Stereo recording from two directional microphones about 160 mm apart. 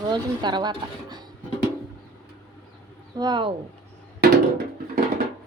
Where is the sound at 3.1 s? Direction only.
25° right (ahead or behind).